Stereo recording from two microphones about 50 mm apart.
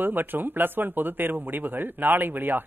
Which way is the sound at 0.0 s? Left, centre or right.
Right.